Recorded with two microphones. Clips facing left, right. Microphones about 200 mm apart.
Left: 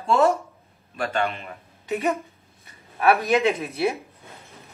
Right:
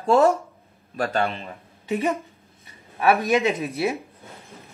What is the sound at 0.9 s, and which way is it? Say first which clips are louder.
Speech: right 2 dB; 35° right (ahead or behind).